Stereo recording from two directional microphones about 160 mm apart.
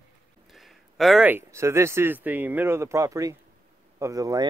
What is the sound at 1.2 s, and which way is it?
Speech, 15° right (ahead or behind).